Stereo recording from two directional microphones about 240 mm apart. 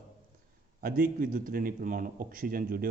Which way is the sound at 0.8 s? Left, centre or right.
Right.